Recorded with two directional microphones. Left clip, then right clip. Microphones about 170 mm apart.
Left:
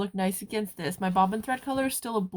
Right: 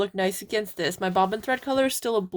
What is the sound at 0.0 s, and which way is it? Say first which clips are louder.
Speech: right 5 dB; 40° right (ahead or behind).